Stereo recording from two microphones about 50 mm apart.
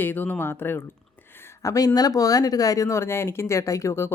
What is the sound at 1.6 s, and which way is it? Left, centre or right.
Speech, left.